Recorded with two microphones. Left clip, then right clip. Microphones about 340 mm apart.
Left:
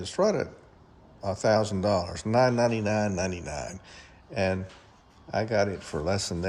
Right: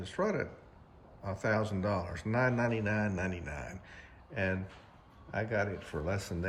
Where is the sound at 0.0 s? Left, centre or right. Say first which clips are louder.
Left 8 dB; centre.